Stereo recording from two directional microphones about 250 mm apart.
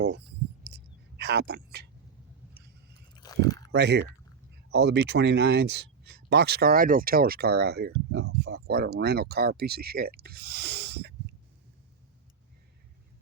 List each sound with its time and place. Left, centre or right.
0.6 s whispering: right
3.2 s a sound: centre
3.7 s speech: right